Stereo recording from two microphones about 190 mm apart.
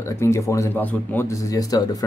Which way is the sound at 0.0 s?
15° left (ahead or behind).